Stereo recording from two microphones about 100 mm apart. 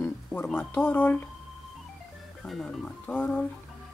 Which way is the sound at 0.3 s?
15° left (ahead or behind).